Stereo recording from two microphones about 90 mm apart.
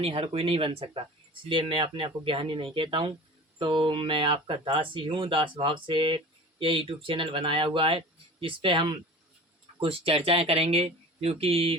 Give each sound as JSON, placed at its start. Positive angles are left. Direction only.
{"t": 0.0, "sound": "speech", "side_deg": -90}
{"t": 9.8, "sound": "speech", "side_deg": -90}